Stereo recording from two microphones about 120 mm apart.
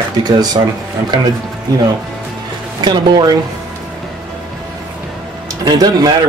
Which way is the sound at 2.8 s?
35° right (ahead or behind).